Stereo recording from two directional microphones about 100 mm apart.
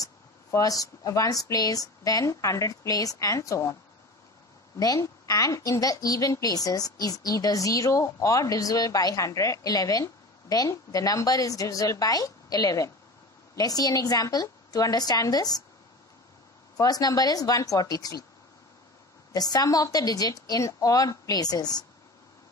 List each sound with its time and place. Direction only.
0.0 s a woman's voice: 35° left (ahead or behind)
4.7 s a woman's voice: 35° left (ahead or behind)
16.7 s a woman's voice: 40° left (ahead or behind)
19.3 s a woman's voice: 40° left (ahead or behind)